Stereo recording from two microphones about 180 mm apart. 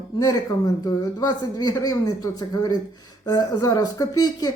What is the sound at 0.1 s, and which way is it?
Speech, 20° left (ahead or behind).